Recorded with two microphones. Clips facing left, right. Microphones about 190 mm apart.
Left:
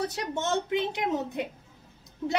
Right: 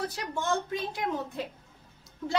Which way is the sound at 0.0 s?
25° left (ahead or behind).